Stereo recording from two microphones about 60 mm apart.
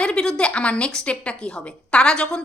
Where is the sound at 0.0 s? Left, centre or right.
Centre.